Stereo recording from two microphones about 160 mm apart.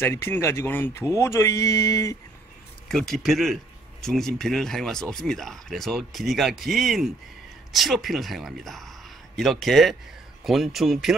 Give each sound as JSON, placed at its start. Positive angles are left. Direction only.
{"t": 0.0, "sound": "speech", "side_deg": 15}
{"t": 2.9, "sound": "speech", "side_deg": 0}